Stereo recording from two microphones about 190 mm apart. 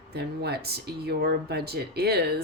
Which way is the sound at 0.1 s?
60° right (ahead or behind).